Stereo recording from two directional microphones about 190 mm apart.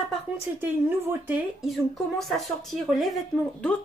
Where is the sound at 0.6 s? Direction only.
10° right (ahead or behind).